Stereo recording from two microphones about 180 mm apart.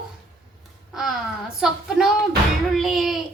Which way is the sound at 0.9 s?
5° right (ahead or behind).